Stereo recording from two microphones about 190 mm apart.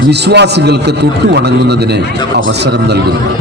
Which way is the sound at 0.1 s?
60° right (ahead or behind).